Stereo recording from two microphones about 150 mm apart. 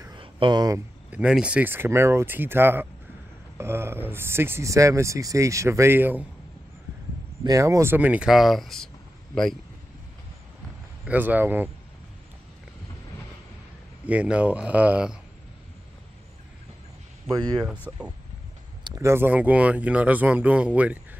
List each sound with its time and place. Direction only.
0.2 s a sound: 30° right (ahead or behind)
1.1 s speech: 5° right (ahead or behind)
7.4 s speech: 20° right (ahead or behind); by 9.6 s 5° left (ahead or behind)
11.1 s speech: 10° right (ahead or behind)
14.0 s speech: 10° right (ahead or behind)
17.3 s speech: 25° right (ahead or behind)
17.9 s speech: 10° right (ahead or behind)